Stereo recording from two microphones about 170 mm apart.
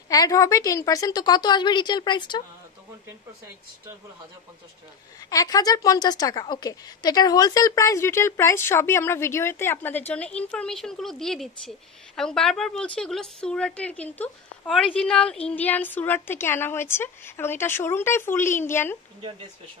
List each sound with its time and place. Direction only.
0.1 s a woman's voice: 20° left (ahead or behind)
5.3 s a woman's voice: 20° left (ahead or behind)